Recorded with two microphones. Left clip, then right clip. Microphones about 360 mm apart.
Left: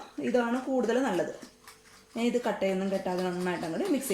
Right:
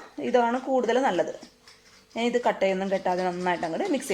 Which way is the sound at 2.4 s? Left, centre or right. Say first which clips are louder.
Right 5 dB; right.